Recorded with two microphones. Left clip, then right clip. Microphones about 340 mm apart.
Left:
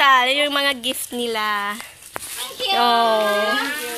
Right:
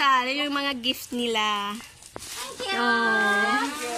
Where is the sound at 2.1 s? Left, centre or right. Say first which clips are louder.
Left 8 dB; left.